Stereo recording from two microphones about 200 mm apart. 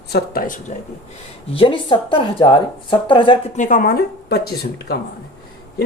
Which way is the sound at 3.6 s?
40° left (ahead or behind).